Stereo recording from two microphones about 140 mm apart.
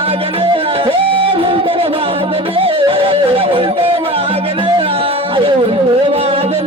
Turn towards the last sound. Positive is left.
turn(degrees=-45)  # may be behind; listen again after turning